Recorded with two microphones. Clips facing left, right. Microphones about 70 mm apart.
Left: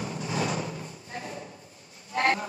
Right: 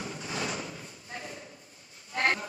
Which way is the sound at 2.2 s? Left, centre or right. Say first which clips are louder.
Left 3 dB; left.